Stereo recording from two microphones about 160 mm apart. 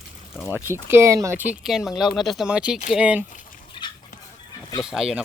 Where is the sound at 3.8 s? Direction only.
30° left (ahead or behind).